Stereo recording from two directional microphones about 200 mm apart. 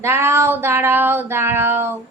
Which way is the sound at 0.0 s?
10° right (ahead or behind).